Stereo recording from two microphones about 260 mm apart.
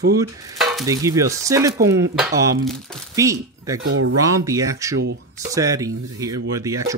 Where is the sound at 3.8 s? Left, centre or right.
Right.